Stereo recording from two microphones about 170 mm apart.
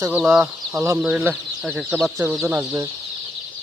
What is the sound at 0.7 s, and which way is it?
Speech, 15° right (ahead or behind).